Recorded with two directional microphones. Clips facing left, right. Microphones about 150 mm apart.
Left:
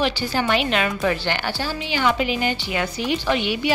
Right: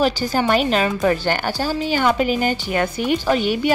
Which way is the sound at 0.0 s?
40° right (ahead or behind).